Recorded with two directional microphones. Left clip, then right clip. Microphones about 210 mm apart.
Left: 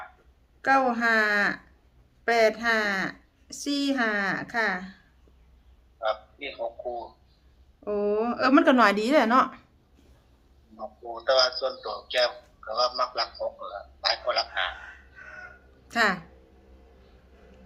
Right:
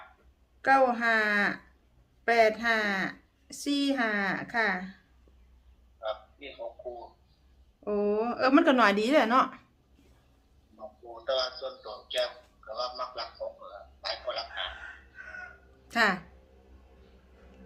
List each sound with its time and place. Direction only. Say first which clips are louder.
0.6 s a woman's voice: left 1 dB; 5° left (ahead or behind)
6.0 s a man's voice: left 7 dB; 50° left (ahead or behind)
7.9 s a woman's voice: left 2 dB; 5° left (ahead or behind)
10.8 s a man's voice: left 8 dB; 50° left (ahead or behind)
15.9 s a woman's voice: left 2 dB; 5° left (ahead or behind)